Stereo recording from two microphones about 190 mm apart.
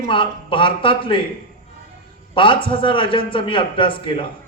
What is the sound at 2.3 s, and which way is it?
A man's voice, 25° left (ahead or behind).